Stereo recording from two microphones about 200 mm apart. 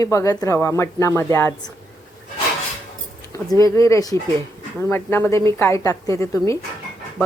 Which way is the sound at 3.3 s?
15° left (ahead or behind).